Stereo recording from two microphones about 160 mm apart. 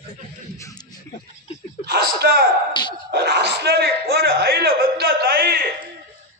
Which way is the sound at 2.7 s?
30° left (ahead or behind).